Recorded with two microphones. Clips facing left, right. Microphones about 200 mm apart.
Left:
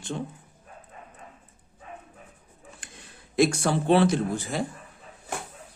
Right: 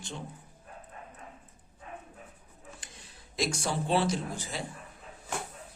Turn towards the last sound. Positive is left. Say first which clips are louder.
# left 8 dB
turn(degrees=55)  # may be behind; listen again after turning